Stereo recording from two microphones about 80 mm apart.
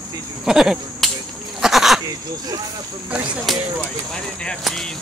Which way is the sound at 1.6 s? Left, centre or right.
Centre.